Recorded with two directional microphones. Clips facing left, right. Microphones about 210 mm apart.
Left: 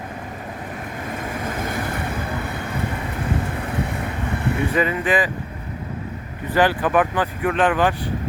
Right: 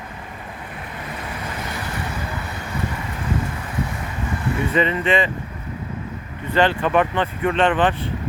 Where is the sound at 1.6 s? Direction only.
50° left (ahead or behind).